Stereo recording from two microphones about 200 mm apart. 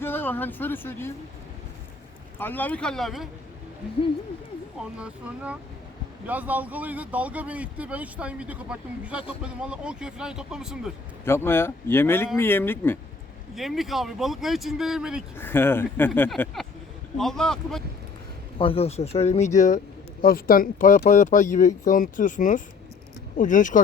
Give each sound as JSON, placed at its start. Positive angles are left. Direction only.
{"t": 0.0, "sound": "speech", "side_deg": 10}
{"t": 2.4, "sound": "speech", "side_deg": 10}
{"t": 4.8, "sound": "speech", "side_deg": -5}
{"t": 11.3, "sound": "speech", "side_deg": 10}
{"t": 13.6, "sound": "speech", "side_deg": 0}
{"t": 15.4, "sound": "speech", "side_deg": 10}
{"t": 18.6, "sound": "speech", "side_deg": 30}